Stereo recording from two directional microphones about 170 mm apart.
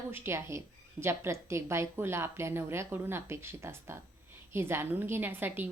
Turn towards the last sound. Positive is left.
turn(degrees=-10)  # may be behind; listen again after turning